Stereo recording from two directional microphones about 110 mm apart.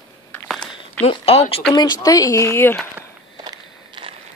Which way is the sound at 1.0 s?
60° left (ahead or behind).